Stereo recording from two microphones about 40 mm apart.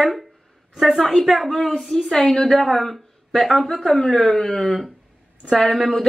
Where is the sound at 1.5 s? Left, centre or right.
Centre.